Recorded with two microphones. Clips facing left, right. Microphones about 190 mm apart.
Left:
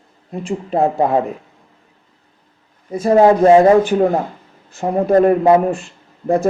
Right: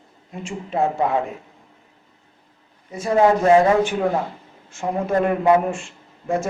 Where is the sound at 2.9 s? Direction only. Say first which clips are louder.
Left 6 dB; 40° left (ahead or behind).